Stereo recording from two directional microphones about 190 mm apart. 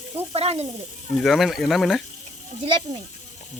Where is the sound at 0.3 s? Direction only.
35° right (ahead or behind).